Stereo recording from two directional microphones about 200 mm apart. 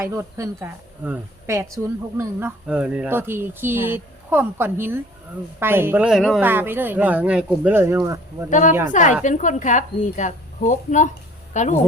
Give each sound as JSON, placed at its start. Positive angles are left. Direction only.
{"t": 0.0, "sound": "speech", "side_deg": -15}
{"t": 8.4, "sound": "a woman's voice", "side_deg": 40}